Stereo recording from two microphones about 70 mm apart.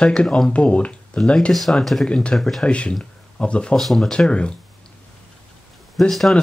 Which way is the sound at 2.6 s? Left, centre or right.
Centre.